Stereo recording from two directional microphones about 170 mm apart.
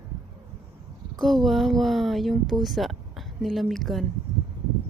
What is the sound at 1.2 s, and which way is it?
Speech, centre (ahead or behind).